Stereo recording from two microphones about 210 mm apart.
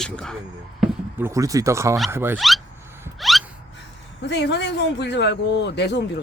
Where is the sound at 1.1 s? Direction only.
15° right (ahead or behind).